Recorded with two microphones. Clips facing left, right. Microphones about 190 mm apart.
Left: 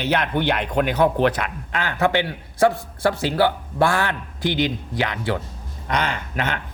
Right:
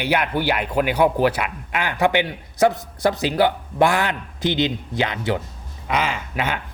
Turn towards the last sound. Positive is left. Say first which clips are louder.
# right 1 dB
turn(degrees=-10)  # may be behind; listen again after turning